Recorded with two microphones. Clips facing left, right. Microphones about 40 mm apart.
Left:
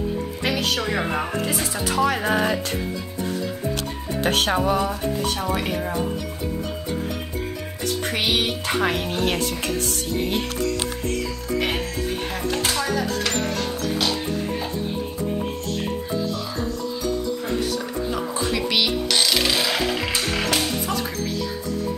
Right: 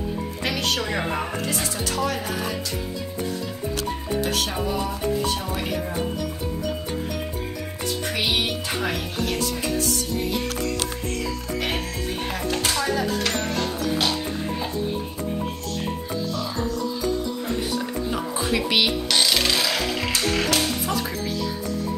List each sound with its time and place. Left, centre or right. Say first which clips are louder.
0.4 s speech: left 1 dB; centre
2.2 s music: left 7 dB; left
4.2 s speech: left 7 dB; left
4.6 s music: left 5 dB; left
8.2 s music: left 1 dB; left
12.6 s music: right 1 dB; centre
17.7 s music: even; centre